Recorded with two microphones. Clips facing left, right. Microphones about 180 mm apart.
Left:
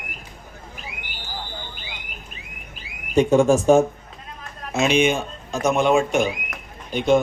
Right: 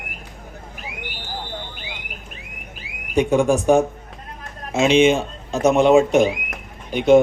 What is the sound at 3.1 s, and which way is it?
A man's voice, 15° right (ahead or behind).